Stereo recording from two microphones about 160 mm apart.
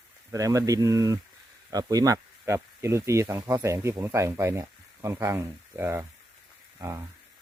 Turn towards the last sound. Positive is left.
turn(degrees=-15)  # may be behind; listen again after turning